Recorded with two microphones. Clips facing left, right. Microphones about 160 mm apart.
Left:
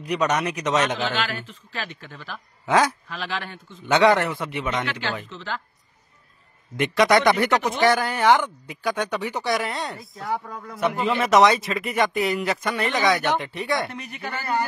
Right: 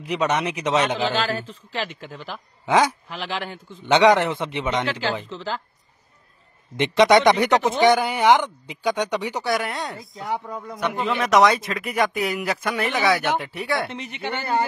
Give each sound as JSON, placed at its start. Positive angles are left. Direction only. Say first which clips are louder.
{"t": 0.1, "sound": "speech", "louder": "even", "side_deg": -10}
{"t": 0.7, "sound": "a man's voice", "louder": "right 2 dB", "side_deg": -30}
{"t": 2.7, "sound": "speech", "louder": "right 1 dB", "side_deg": -10}
{"t": 3.1, "sound": "a man's voice", "louder": "right 2 dB", "side_deg": -30}
{"t": 3.9, "sound": "a man's voice", "louder": "right 2 dB", "side_deg": -15}
{"t": 6.8, "sound": "a man's voice", "louder": "right 3 dB", "side_deg": -25}
{"t": 7.9, "sound": "speech", "louder": "right 2 dB", "side_deg": -10}
{"t": 9.4, "sound": "a man's voice", "louder": "right 1 dB", "side_deg": 0}
{"t": 10.2, "sound": "a man's voice", "louder": "right 1 dB", "side_deg": -20}
{"t": 10.8, "sound": "a man's voice", "louder": "left 2 dB", "side_deg": 0}
{"t": 13.8, "sound": "a man's voice", "louder": "right 3 dB", "side_deg": -25}